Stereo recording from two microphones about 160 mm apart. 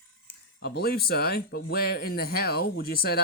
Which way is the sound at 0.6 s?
85° left.